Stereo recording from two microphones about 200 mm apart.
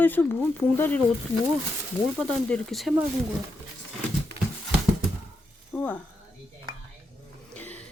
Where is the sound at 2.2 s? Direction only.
5° left (ahead or behind).